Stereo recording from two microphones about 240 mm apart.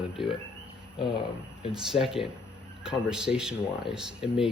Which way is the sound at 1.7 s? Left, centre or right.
Centre.